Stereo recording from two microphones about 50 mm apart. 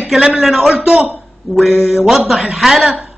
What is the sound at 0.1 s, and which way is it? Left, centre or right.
Speech, centre.